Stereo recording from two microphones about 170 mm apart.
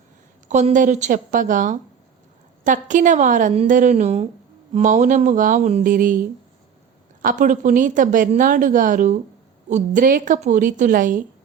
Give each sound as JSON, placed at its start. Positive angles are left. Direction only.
{"t": 0.4, "sound": "a woman's voice", "side_deg": -45}